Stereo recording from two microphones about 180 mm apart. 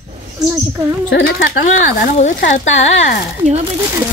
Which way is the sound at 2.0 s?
50° left (ahead or behind).